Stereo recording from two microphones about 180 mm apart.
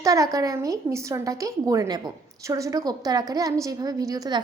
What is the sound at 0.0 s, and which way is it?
A woman's voice, 20° right (ahead or behind).